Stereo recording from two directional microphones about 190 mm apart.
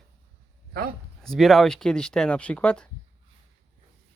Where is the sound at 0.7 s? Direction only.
50° right (ahead or behind).